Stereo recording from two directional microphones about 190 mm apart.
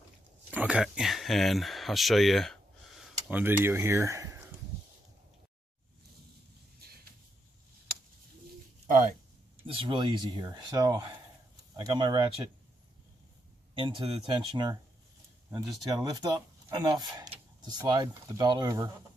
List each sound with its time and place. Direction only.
0.5 s speech: 5° right (ahead or behind)
9.6 s speech: 25° right (ahead or behind)
13.7 s speech: 25° right (ahead or behind)
15.9 s speech: 20° right (ahead or behind)